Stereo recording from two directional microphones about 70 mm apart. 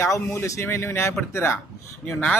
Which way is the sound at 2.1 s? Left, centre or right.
Centre.